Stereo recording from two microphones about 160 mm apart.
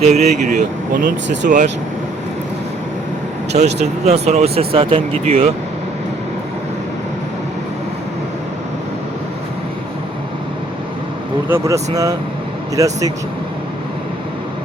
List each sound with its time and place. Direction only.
0.0 s speech: 45° right (ahead or behind)
3.8 s speech: 45° right (ahead or behind)
11.4 s speech: 15° right (ahead or behind)